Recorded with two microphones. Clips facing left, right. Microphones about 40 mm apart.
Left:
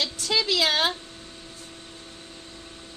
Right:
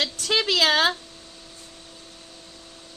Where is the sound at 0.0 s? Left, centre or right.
Right.